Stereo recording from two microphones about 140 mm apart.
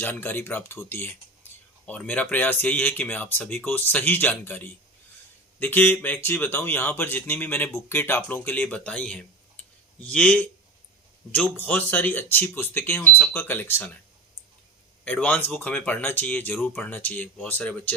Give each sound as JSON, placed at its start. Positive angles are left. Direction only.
{"t": 0.0, "sound": "speech", "side_deg": 15}
{"t": 15.0, "sound": "speech", "side_deg": 10}